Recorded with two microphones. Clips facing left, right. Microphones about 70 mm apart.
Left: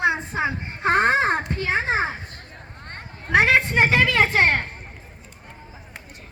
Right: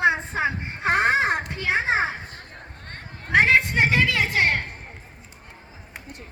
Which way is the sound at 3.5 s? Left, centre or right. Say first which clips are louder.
Left 1 dB; left.